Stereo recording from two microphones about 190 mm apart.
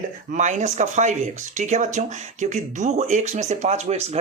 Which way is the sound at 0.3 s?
40° right (ahead or behind).